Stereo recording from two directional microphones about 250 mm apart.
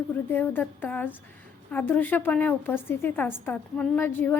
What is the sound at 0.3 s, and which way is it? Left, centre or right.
A woman's voice, centre.